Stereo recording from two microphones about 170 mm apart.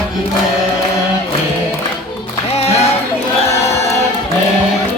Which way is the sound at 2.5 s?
40° left (ahead or behind).